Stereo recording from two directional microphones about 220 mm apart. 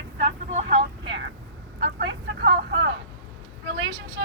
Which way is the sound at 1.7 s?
45° right (ahead or behind).